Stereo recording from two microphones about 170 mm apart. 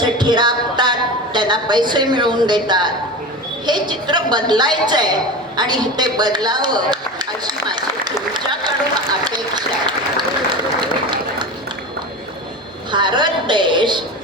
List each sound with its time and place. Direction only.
0.0 s a woman's voice: 25° right (ahead or behind)
12.9 s a woman's voice: 25° right (ahead or behind)